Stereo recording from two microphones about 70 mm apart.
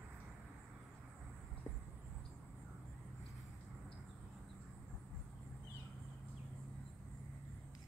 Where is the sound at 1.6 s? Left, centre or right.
Left.